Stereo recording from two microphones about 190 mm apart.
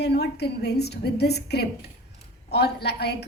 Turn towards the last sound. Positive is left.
turn(degrees=60)  # may be behind; listen again after turning